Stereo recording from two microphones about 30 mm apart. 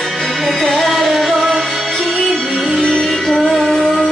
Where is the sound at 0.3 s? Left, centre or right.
Centre.